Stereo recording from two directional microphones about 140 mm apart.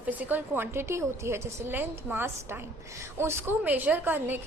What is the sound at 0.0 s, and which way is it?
A woman's voice, 10° right (ahead or behind).